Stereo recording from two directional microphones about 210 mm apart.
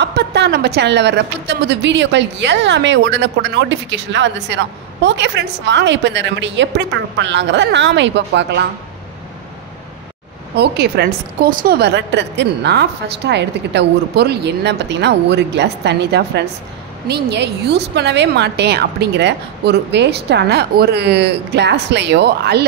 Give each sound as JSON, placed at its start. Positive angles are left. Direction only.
{"t": 0.0, "sound": "a woman's voice", "side_deg": -50}
{"t": 10.5, "sound": "a woman's voice", "side_deg": -50}